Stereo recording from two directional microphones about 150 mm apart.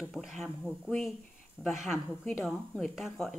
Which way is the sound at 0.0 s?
Centre (ahead or behind).